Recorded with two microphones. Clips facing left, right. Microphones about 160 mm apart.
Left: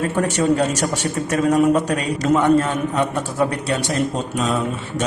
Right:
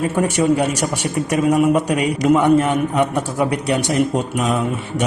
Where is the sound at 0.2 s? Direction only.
10° right (ahead or behind).